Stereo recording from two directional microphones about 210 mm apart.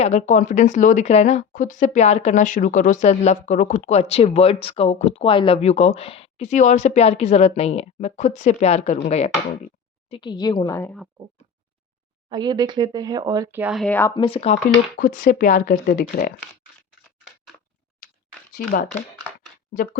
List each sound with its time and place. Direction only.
0.0 s a woman's voice: 35° left (ahead or behind); by 10.9 s 15° left (ahead or behind)
12.3 s speech: 20° right (ahead or behind); by 14.1 s 5° left (ahead or behind)
14.2 s a woman's voice: 25° left (ahead or behind)
14.9 s speech: 40° left (ahead or behind)
18.0 s a sound: 40° left (ahead or behind)
18.5 s speech: 45° left (ahead or behind)